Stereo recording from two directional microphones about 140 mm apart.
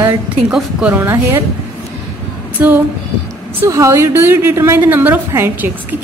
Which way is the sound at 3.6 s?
20° right (ahead or behind).